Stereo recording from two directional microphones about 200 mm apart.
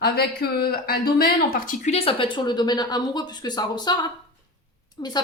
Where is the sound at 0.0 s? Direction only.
50° left (ahead or behind).